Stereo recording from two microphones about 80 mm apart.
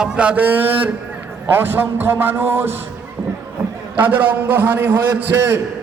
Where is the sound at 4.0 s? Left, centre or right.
Right.